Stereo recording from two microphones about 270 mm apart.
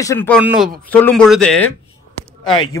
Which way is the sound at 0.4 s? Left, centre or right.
Centre.